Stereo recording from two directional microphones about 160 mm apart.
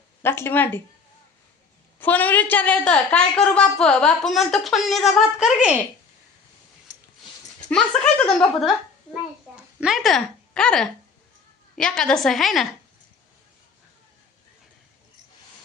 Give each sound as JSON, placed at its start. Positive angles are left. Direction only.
{"t": 0.2, "sound": "speech", "side_deg": 15}
{"t": 2.0, "sound": "a woman's voice", "side_deg": 10}
{"t": 7.7, "sound": "a woman's voice", "side_deg": 5}
{"t": 9.6, "sound": "a sound", "side_deg": -5}
{"t": 11.8, "sound": "a woman's voice", "side_deg": 5}